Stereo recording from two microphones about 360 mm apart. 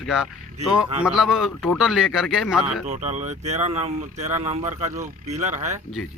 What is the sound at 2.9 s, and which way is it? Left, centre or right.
Speech, centre.